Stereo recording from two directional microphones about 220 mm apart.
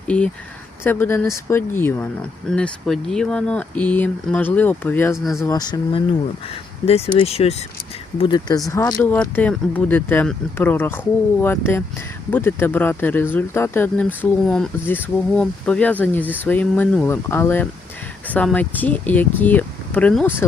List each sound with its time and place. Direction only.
0.9 s speech: 10° left (ahead or behind)